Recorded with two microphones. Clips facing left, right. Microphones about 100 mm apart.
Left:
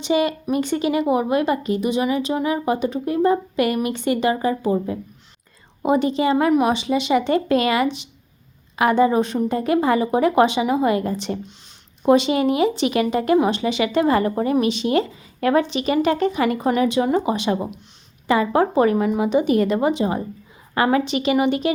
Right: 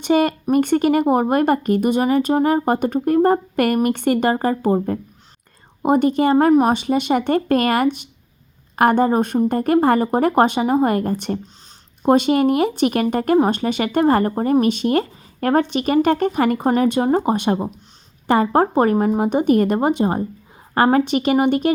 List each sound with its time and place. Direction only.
0.0 s speech: 50° right (ahead or behind)
6.3 s speech: 40° right (ahead or behind)